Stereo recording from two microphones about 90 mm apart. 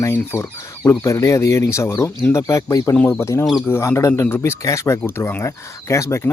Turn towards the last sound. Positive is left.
turn(degrees=30)  # may be behind; listen again after turning